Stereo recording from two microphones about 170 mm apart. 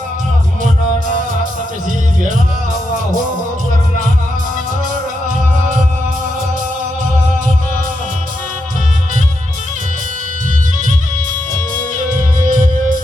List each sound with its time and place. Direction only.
12.5 s music: 50° right (ahead or behind)